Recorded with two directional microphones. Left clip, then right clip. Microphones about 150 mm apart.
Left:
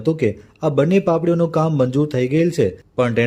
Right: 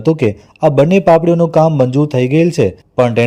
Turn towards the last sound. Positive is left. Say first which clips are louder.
# right 6 dB
turn(degrees=-25)  # may be behind; listen again after turning